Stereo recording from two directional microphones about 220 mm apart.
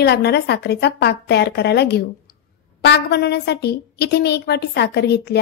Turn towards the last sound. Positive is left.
turn(degrees=50)  # may be behind; listen again after turning